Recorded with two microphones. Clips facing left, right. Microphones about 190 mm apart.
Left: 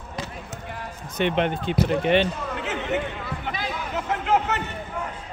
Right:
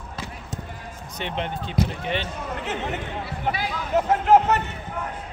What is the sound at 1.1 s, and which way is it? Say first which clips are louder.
Speech: left 7 dB; 65° left (ahead or behind).